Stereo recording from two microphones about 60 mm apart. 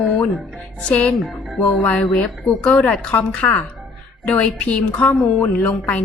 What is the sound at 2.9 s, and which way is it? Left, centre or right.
A woman's voice, centre.